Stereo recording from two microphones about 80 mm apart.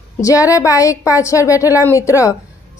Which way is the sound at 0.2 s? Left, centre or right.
Left.